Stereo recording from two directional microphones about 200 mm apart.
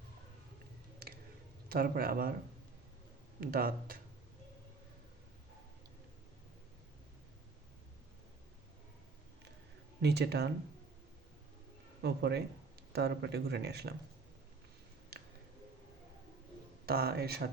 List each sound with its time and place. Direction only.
1.7 s speech: 45° right (ahead or behind)
3.4 s speech: 45° right (ahead or behind)
10.0 s speech: 55° right (ahead or behind)
12.0 s speech: 55° right (ahead or behind)
15.1 s a sound: 50° right (ahead or behind)
16.8 s speech: 50° right (ahead or behind)